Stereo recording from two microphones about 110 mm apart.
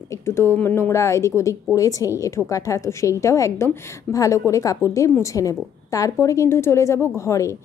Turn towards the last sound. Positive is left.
turn(degrees=30)  # may be behind; listen again after turning